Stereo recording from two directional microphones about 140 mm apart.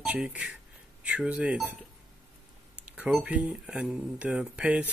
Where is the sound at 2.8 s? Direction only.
5° right (ahead or behind).